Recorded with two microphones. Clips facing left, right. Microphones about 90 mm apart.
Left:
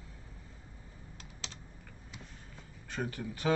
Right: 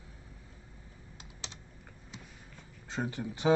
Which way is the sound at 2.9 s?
20° right (ahead or behind).